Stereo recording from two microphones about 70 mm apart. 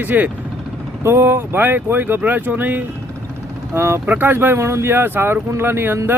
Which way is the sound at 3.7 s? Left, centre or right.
Right.